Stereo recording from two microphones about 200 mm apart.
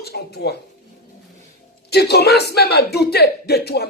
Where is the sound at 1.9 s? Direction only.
55° left (ahead or behind).